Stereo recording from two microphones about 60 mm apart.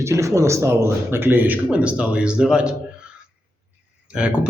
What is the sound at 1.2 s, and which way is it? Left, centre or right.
Speech, right.